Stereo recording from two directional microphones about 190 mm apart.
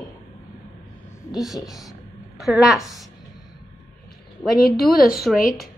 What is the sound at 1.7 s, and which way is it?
A woman's voice, centre (ahead or behind).